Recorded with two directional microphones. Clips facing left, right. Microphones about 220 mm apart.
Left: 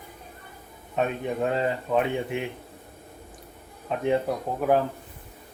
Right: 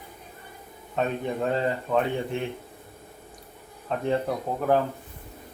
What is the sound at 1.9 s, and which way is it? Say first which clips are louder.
Speech: left 1 dB; 10° left (ahead or behind).